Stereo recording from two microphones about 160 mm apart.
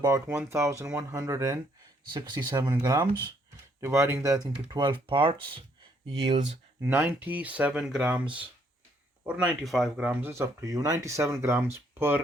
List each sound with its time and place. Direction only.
0.0 s speech: 20° right (ahead or behind)
6.8 s speech: 15° right (ahead or behind)
9.2 s speech: 5° right (ahead or behind)